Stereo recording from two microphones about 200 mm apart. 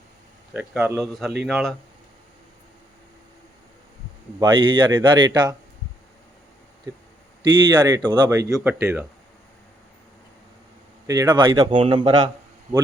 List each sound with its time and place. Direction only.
0.5 s a man's voice: 5° right (ahead or behind)
4.4 s speech: 25° right (ahead or behind)
7.5 s speech: 20° right (ahead or behind)
11.0 s speech: 15° right (ahead or behind)